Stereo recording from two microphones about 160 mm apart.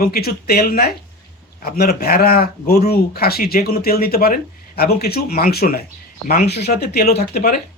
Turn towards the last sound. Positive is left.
turn(degrees=80)